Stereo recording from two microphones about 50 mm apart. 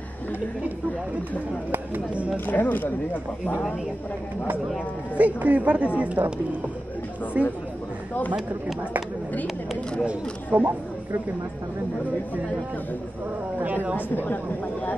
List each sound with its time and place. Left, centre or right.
2.3 s speech: left
5.1 s speech: right
7.3 s speech: right
10.0 s speech: right
13.9 s speech: left